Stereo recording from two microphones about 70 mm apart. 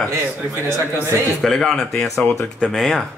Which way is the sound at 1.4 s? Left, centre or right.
Centre.